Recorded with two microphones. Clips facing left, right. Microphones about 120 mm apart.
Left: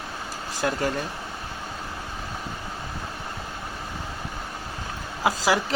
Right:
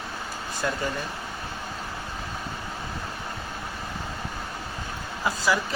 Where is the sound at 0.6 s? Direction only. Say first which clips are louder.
Left 3 dB; 60° left (ahead or behind).